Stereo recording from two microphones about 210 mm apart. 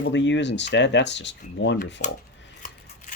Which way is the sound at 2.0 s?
35° left (ahead or behind).